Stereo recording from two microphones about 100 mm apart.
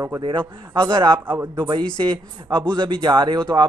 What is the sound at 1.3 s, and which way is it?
Speech, 20° right (ahead or behind).